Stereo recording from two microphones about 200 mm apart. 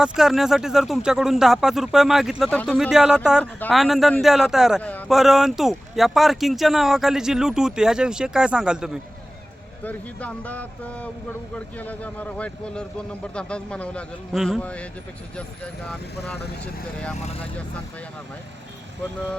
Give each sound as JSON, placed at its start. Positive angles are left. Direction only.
{"t": 0.0, "sound": "speech", "side_deg": 0}
{"t": 9.8, "sound": "speech", "side_deg": 5}
{"t": 17.2, "sound": "speech", "side_deg": 30}